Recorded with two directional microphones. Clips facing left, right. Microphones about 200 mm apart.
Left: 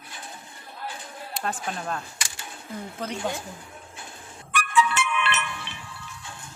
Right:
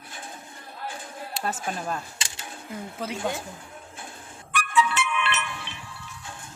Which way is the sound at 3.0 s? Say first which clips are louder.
Right 1 dB; 5° right (ahead or behind).